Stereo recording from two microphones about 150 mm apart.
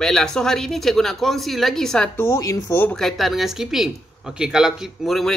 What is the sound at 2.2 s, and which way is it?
Speech, 20° left (ahead or behind).